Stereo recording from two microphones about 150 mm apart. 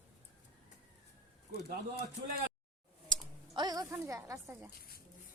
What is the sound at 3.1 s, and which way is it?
Typing, 30° right (ahead or behind).